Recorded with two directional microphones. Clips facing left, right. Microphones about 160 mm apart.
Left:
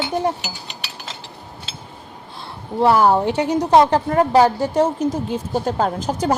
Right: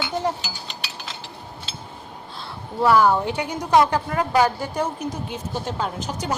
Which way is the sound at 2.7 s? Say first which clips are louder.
Left 3 dB; 25° left (ahead or behind).